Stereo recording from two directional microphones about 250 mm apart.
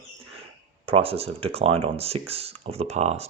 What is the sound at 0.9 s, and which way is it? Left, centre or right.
Speech, right.